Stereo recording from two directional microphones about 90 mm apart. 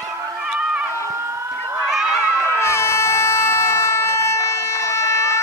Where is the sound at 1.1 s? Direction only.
30° right (ahead or behind).